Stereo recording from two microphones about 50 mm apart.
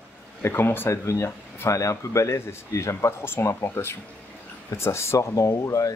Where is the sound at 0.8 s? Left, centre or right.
Left.